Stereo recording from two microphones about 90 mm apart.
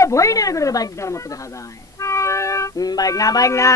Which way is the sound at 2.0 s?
35° left (ahead or behind).